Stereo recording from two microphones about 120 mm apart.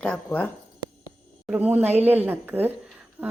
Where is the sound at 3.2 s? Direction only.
15° right (ahead or behind).